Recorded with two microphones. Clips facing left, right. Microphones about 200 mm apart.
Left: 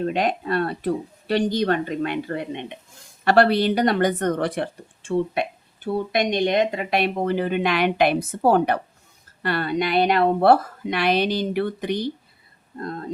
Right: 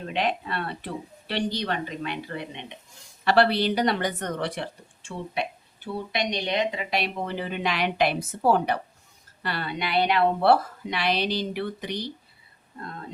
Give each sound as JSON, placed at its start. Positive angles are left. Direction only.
{"t": 0.1, "sound": "a woman's voice", "side_deg": 45}